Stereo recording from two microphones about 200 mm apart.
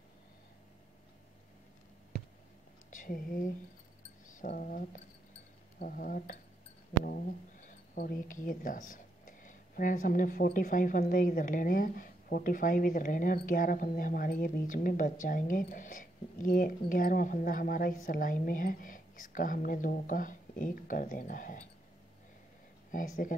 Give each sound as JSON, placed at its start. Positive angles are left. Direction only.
{"t": 2.9, "sound": "speech", "side_deg": 45}
{"t": 22.8, "sound": "speech", "side_deg": 40}